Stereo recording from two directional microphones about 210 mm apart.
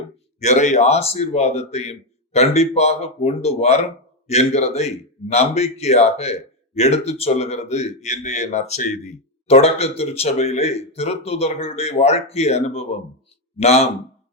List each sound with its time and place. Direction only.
0.3 s speech: 35° left (ahead or behind)